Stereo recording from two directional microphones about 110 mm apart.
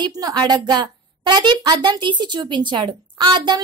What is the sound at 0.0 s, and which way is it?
A woman's voice, 40° right (ahead or behind).